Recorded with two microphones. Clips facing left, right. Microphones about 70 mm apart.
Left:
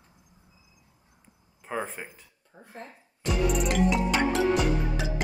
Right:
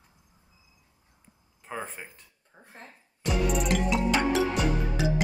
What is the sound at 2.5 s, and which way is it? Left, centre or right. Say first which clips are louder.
Speech: left 4 dB; right.